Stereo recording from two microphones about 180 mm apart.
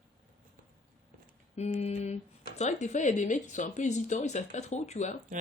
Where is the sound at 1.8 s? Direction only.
40° left (ahead or behind).